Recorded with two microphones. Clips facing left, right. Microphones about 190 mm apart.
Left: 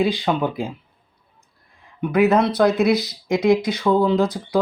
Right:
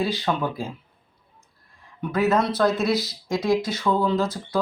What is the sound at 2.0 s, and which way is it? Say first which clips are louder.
Speech: left 5 dB; 15° left (ahead or behind).